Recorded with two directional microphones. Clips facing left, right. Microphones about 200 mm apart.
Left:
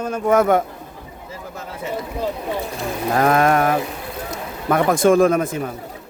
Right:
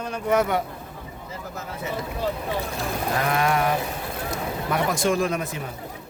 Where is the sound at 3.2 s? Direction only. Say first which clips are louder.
Left 8 dB; 50° left (ahead or behind).